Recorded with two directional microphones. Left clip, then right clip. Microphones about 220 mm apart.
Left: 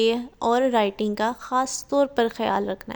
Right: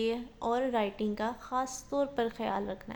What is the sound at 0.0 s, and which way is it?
A woman's voice, 45° left (ahead or behind).